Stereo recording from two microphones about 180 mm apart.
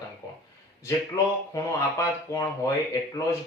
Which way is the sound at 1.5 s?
20° left (ahead or behind).